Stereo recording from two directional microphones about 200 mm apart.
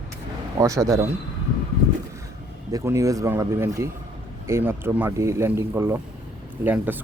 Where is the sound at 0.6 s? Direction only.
15° right (ahead or behind).